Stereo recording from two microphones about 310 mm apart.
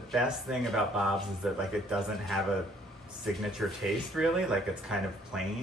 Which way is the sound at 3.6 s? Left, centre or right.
Centre.